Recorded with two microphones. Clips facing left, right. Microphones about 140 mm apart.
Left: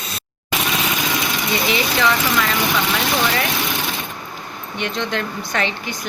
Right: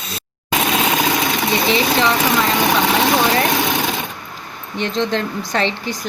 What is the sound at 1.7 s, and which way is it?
Speech, 30° right (ahead or behind).